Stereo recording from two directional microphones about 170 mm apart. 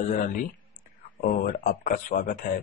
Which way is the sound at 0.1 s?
50° left (ahead or behind).